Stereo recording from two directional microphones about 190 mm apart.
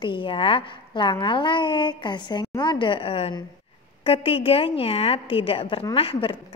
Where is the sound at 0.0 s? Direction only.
25° left (ahead or behind).